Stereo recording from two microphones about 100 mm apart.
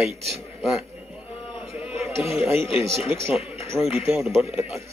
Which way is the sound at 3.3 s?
80° left.